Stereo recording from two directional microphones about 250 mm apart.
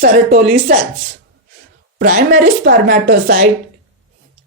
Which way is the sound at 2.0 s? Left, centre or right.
Right.